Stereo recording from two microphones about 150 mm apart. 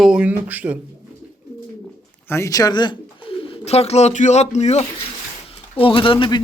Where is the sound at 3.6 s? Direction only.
45° left (ahead or behind).